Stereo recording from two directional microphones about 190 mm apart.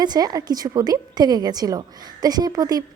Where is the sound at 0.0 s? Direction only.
20° right (ahead or behind).